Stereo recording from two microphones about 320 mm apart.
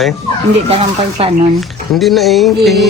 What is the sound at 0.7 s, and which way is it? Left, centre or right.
Speech, centre.